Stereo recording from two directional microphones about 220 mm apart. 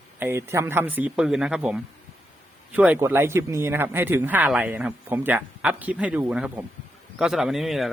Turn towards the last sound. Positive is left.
turn(degrees=0)  # may be behind; listen again after turning